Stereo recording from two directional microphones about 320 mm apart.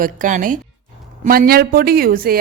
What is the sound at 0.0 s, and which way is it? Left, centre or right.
A woman's voice, right.